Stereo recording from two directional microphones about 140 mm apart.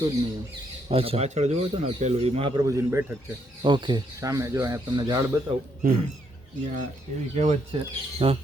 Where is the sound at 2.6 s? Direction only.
20° right (ahead or behind).